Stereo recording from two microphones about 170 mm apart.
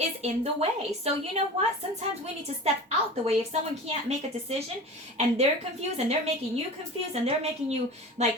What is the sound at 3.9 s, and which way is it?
A woman's voice, 35° right (ahead or behind).